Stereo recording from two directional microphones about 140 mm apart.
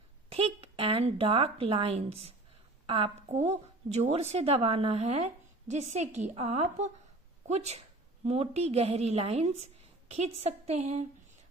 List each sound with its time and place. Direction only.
0.3 s a woman's voice: 45° right (ahead or behind)
3.3 s a woman's voice: 55° right (ahead or behind)